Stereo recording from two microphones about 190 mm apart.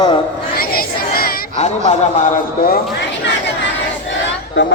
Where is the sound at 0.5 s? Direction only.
50° left (ahead or behind).